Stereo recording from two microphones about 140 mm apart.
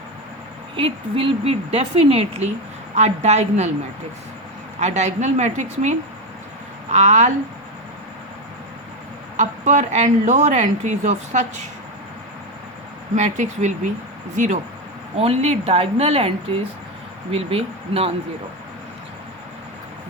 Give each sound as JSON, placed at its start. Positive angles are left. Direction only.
{"t": 0.8, "sound": "speech", "side_deg": -40}
{"t": 4.8, "sound": "speech", "side_deg": -55}
{"t": 9.4, "sound": "speech", "side_deg": -60}
{"t": 13.1, "sound": "speech", "side_deg": -60}
{"t": 15.1, "sound": "speech", "side_deg": -45}